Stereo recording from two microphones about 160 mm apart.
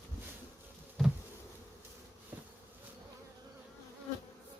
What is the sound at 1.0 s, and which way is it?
Bee, centre (ahead or behind).